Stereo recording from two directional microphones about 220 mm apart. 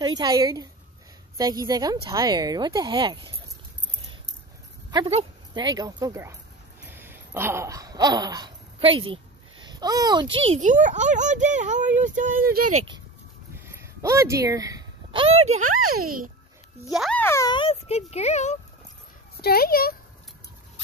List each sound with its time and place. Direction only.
0.0 s speech: 20° right (ahead or behind)
4.9 s speech: 20° right (ahead or behind)
6.9 s a sound: 10° right (ahead or behind)
10.5 s a child's voice: 35° right (ahead or behind)
13.6 s speech: 10° right (ahead or behind); by 16.0 s 35° right (ahead or behind)
16.9 s speech: centre (ahead or behind); by 18.6 s 30° left (ahead or behind)
19.4 s speech: 45° left (ahead or behind)